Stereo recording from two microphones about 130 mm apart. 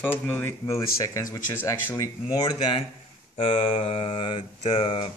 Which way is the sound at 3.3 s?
45° left (ahead or behind).